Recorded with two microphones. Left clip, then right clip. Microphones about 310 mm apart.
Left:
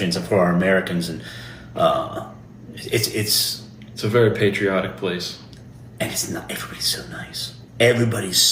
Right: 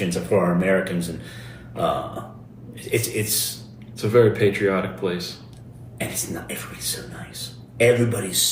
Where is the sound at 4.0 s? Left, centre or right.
Centre.